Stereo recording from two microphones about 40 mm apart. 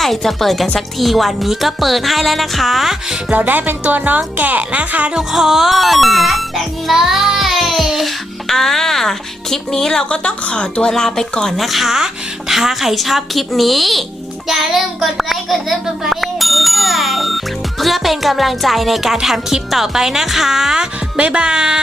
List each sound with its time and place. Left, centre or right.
0.0 s speech: centre
3.2 s speech: right
5.3 s speech: centre
6.8 s music: centre
8.4 s speech: centre
10.1 s a woman's voice: left
10.9 s speech: centre
11.5 s a child's voice: centre
21.2 s speech: right